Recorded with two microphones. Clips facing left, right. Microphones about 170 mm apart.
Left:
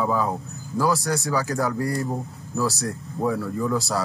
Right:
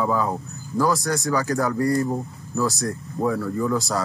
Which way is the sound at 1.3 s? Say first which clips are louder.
Right 3 dB; 5° left (ahead or behind).